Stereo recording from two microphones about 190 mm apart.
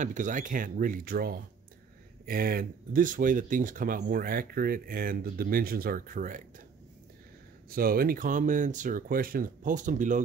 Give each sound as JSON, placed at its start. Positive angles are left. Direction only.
{"t": 0.0, "sound": "speech", "side_deg": -40}
{"t": 7.7, "sound": "speech", "side_deg": -50}